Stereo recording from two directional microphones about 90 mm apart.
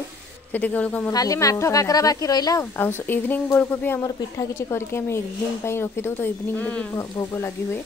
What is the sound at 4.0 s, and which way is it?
Speech, 40° left (ahead or behind).